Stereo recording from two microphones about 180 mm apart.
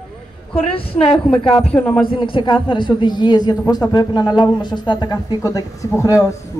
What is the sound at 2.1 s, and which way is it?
Speech, 30° left (ahead or behind).